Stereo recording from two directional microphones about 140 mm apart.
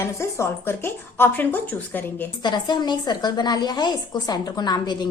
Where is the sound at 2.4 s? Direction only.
30° left (ahead or behind).